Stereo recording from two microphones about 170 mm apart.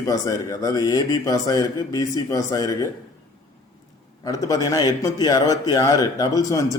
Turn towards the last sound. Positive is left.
turn(degrees=20)  # may be behind; listen again after turning